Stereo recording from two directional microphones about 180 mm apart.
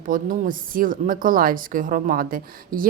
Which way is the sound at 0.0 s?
50° right (ahead or behind).